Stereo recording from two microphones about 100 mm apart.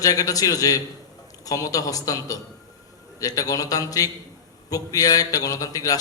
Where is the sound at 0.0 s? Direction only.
35° left (ahead or behind).